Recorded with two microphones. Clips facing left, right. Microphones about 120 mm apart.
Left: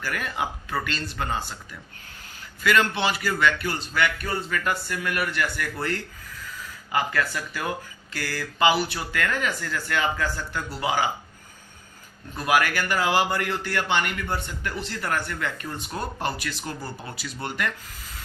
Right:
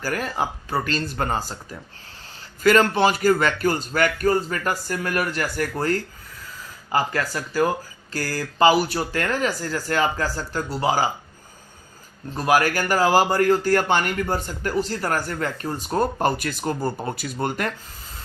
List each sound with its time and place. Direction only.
0.0 s a man's voice: 35° right (ahead or behind)
12.3 s a man's voice: 35° right (ahead or behind)